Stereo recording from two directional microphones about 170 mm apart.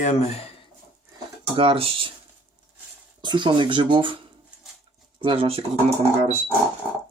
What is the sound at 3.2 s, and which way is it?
Speech, 25° right (ahead or behind).